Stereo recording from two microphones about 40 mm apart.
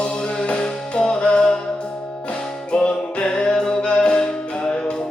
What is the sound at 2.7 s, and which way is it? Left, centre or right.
Music, left.